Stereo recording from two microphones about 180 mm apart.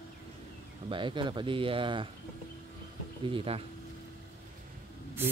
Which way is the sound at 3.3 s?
30° right (ahead or behind).